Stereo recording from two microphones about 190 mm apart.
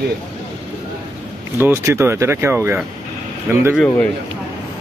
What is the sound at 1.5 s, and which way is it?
Speech, 10° right (ahead or behind).